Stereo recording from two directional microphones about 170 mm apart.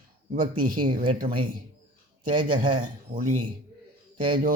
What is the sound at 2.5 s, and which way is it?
Speech, 50° right (ahead or behind).